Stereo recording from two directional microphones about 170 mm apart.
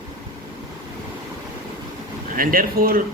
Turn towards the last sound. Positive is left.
turn(degrees=-55)  # may be behind; listen again after turning